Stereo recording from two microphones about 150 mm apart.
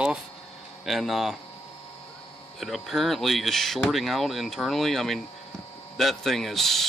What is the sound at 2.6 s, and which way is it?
Speech, centre (ahead or behind).